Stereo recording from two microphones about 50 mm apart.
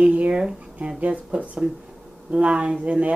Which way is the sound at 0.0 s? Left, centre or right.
Right.